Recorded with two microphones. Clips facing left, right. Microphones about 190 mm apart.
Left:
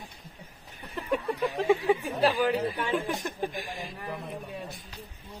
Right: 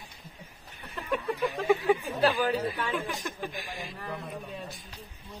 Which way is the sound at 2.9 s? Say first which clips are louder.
Left 3 dB; 30° left (ahead or behind).